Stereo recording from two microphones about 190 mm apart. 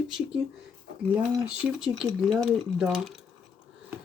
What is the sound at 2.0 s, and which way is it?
Speech, centre (ahead or behind).